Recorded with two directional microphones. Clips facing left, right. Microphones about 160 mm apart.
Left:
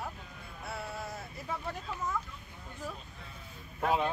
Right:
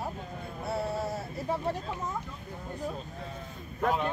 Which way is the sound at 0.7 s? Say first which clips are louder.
Right 8 dB; 35° right (ahead or behind).